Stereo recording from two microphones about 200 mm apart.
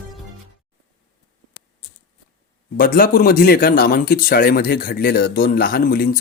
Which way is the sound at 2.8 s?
45° left (ahead or behind).